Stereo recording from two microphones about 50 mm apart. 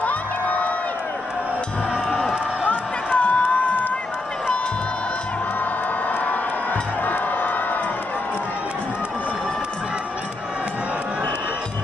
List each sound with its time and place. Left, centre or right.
0.0 s crowd: left
2.6 s a sound: left
3.5 s crowd: left
6.0 s music: left